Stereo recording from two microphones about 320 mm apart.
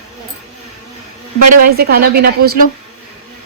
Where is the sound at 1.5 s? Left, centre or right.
Right.